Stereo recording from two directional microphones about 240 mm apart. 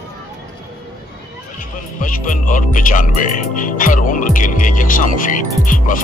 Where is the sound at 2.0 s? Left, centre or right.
Left.